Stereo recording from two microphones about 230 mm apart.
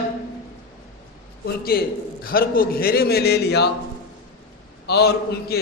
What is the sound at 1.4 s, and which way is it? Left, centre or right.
A man's voice, left.